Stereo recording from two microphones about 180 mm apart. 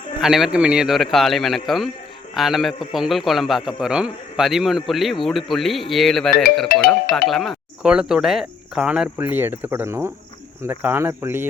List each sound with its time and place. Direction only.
0.2 s a man's voice: centre (ahead or behind)
6.7 s speech: 55° left (ahead or behind)
7.1 s speech: centre (ahead or behind); by 11.4 s 15° right (ahead or behind)